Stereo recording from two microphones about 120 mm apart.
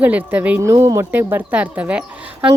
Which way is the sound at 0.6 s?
25° right (ahead or behind).